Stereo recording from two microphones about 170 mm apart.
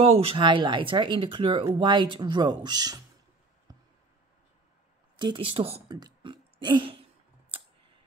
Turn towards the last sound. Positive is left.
turn(degrees=-30)  # may be behind; listen again after turning